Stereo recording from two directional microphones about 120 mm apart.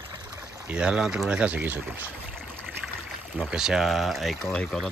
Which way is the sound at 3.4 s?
5° right (ahead or behind).